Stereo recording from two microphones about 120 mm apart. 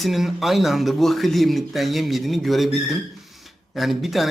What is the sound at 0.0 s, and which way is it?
Speech, centre (ahead or behind).